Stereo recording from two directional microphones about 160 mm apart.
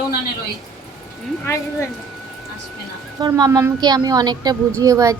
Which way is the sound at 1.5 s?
15° left (ahead or behind).